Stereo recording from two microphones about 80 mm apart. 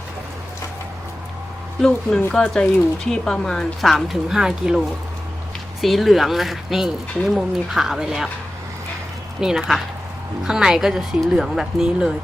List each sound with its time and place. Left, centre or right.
1.8 s speech: centre
5.8 s speech: centre
9.4 s speech: centre